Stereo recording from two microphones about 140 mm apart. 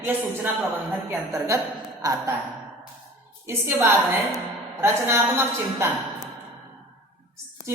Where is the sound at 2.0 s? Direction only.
25° right (ahead or behind).